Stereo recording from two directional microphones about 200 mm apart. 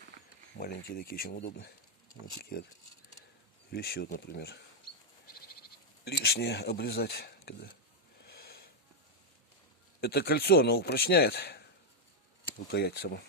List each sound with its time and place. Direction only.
0.6 s speech: 45° left (ahead or behind)
3.7 s speech: 50° left (ahead or behind)
6.1 s speech: 55° left (ahead or behind)
8.2 s a sound: 50° left (ahead or behind)
10.0 s speech: 55° left (ahead or behind)